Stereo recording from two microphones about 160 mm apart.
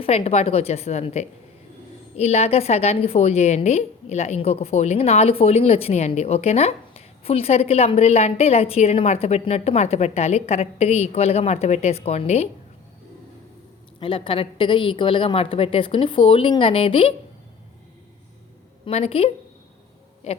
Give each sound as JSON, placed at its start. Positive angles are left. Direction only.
{"t": 0.0, "sound": "a woman's voice", "side_deg": 40}
{"t": 14.0, "sound": "a woman's voice", "side_deg": 35}
{"t": 18.9, "sound": "a woman's voice", "side_deg": 40}